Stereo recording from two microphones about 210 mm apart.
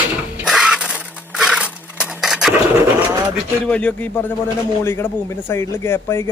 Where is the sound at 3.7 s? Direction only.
5° left (ahead or behind).